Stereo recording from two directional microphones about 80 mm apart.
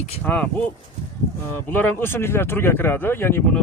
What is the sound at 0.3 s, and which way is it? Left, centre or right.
Speech, centre.